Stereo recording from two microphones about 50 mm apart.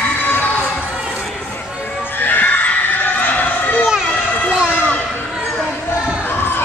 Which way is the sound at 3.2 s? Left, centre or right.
Left.